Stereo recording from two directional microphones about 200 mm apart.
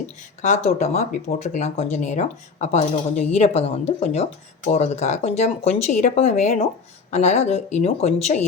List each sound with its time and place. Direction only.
0.4 s speech: 35° left (ahead or behind)